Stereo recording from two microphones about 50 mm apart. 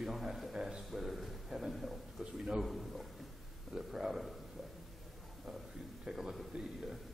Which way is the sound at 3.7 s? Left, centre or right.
Centre.